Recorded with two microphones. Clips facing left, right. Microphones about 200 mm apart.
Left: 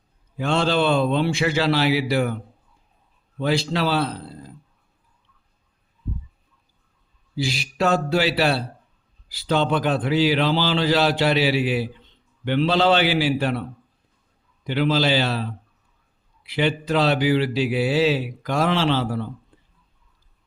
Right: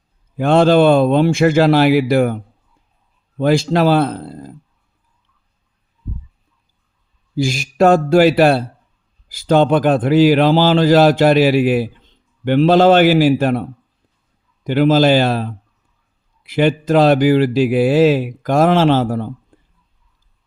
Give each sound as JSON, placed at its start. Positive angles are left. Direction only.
{"t": 0.3, "sound": "speech", "side_deg": -50}
{"t": 7.3, "sound": "speech", "side_deg": -45}
{"t": 19.5, "sound": "a sound", "side_deg": -50}